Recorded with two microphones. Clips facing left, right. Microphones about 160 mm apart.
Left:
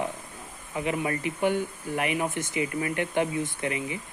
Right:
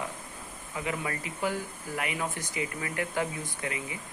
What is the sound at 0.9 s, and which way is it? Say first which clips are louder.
Speech: left 6 dB; 25° left (ahead or behind).